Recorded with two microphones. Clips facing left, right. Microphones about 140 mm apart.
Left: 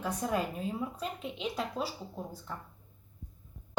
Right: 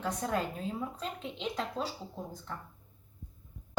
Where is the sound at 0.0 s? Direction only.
10° left (ahead or behind).